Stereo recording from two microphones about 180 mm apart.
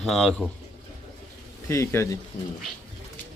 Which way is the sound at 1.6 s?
15° left (ahead or behind).